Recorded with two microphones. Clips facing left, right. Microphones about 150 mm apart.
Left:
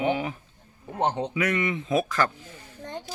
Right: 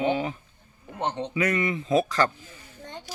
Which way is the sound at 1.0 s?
35° left (ahead or behind).